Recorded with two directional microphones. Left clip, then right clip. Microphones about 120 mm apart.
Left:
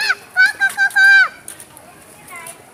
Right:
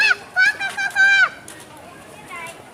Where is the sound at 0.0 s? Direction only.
35° left (ahead or behind).